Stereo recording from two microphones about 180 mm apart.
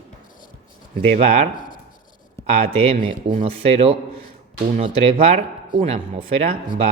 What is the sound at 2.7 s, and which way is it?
Speech, 35° right (ahead or behind).